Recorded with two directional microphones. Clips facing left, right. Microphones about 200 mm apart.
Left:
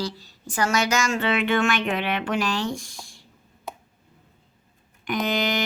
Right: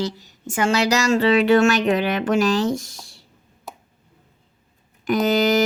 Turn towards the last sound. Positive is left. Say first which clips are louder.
# right 7 dB
turn(degrees=-45)  # may be behind; listen again after turning